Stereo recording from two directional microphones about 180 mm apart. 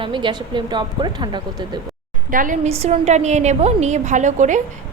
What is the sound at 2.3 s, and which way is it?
Speech, 45° right (ahead or behind).